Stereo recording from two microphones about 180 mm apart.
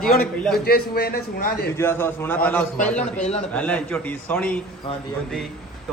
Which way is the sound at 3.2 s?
35° left (ahead or behind).